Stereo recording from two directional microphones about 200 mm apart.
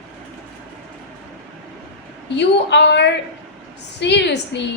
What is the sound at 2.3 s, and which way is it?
A woman's voice, 60° left (ahead or behind).